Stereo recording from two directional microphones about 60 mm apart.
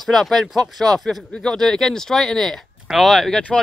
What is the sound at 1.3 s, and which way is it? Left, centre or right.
Speech, centre.